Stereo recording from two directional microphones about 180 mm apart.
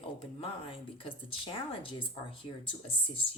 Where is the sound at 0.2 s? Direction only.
30° left (ahead or behind).